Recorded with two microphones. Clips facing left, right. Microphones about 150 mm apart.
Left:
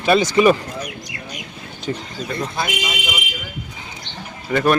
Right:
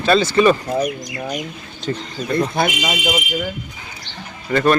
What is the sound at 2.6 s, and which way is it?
Speech, 55° right (ahead or behind).